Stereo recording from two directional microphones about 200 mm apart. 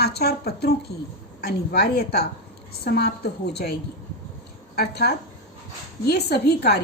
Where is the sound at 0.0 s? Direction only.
55° left (ahead or behind).